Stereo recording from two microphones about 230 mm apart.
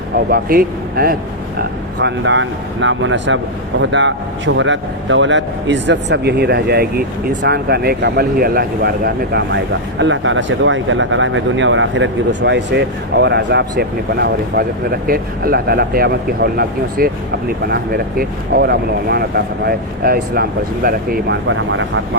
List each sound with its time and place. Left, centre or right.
0.3 s speech: right
2.0 s speech: right
10.0 s speech: right
21.4 s speech: right